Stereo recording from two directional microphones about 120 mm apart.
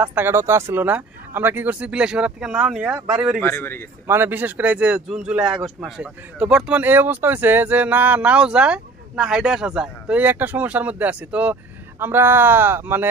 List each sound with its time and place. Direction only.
0.0 s a man's voice: 15° right (ahead or behind)
3.4 s a man's voice: 20° left (ahead or behind)
4.1 s a man's voice: 15° right (ahead or behind)